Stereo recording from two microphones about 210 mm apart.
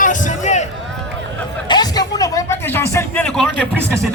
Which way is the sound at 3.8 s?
10° right (ahead or behind).